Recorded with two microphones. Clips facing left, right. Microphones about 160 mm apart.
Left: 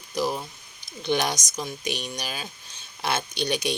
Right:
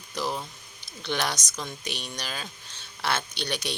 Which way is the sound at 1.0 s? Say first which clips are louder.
Left 4 dB; 15° left (ahead or behind).